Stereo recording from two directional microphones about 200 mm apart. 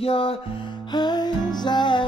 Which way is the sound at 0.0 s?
30° left (ahead or behind).